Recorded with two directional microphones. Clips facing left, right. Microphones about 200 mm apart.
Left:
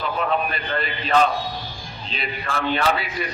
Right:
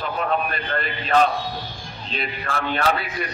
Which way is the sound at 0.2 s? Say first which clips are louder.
Even; 45° right (ahead or behind).